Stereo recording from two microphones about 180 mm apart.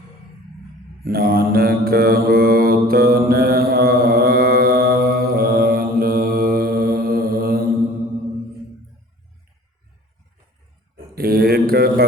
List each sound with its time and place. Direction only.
1.0 s mantra: 55° right (ahead or behind)
10.9 s mantra: 55° right (ahead or behind)